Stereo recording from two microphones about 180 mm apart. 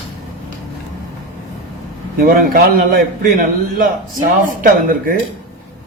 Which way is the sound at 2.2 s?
55° right (ahead or behind).